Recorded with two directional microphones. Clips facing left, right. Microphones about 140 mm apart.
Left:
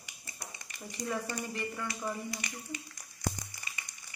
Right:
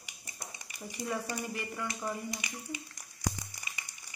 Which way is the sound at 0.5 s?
10° right (ahead or behind).